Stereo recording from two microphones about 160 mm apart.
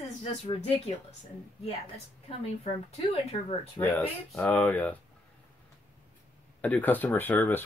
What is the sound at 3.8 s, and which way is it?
Speech, 10° left (ahead or behind).